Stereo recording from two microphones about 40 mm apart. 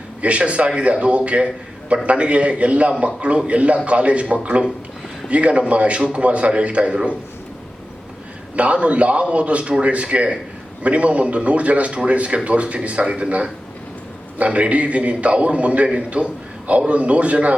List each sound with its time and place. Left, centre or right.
0.2 s a man's voice: right
8.5 s a man's voice: right